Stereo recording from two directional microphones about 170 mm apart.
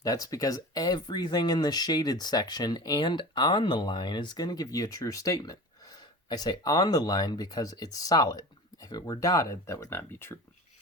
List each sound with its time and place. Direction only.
0.0 s speech: 20° left (ahead or behind)